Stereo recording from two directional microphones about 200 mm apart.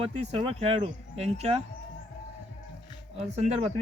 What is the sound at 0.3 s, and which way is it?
Speech, 30° right (ahead or behind).